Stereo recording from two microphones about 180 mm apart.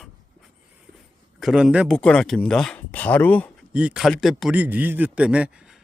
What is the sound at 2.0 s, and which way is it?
Speech, 5° left (ahead or behind).